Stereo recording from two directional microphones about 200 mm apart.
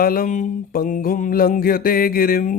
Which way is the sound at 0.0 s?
45° left (ahead or behind).